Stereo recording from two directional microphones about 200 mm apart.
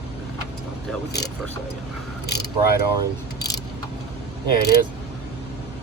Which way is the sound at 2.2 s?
55° left (ahead or behind).